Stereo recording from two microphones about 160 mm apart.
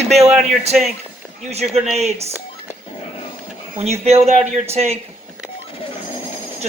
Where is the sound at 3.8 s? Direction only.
40° right (ahead or behind).